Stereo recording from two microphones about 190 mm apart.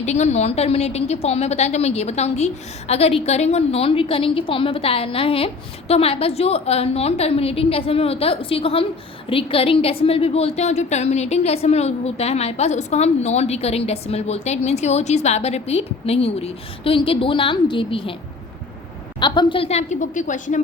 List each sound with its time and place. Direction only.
0.0 s a woman's voice: 35° left (ahead or behind)
19.2 s a woman's voice: 25° left (ahead or behind); by 20.6 s 40° left (ahead or behind)